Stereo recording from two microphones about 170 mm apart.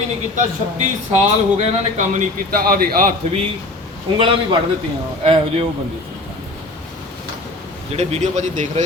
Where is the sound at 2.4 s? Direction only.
60° right (ahead or behind).